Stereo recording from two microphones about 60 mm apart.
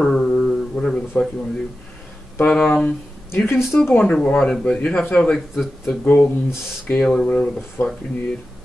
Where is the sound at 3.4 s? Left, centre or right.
Left.